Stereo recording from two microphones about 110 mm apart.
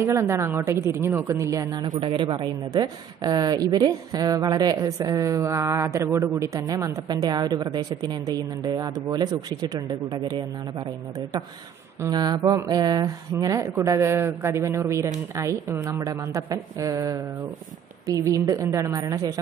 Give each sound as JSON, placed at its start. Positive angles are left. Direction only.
{"t": 0.0, "sound": "speech", "side_deg": -25}
{"t": 1.9, "sound": "a woman's voice", "side_deg": -50}